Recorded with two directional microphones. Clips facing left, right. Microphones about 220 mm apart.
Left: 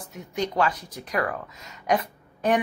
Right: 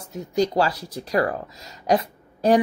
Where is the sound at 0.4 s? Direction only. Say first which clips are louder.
Right 4 dB; 35° right (ahead or behind).